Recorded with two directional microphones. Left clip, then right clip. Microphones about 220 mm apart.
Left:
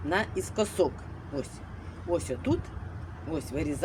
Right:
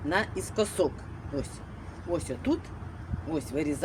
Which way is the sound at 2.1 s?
Centre (ahead or behind).